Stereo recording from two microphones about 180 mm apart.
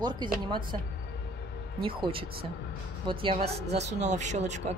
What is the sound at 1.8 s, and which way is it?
Speech, 30° right (ahead or behind).